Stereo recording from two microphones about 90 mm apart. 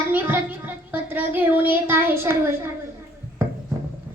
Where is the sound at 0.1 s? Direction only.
20° right (ahead or behind).